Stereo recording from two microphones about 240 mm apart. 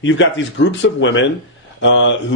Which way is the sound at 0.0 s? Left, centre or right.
Left.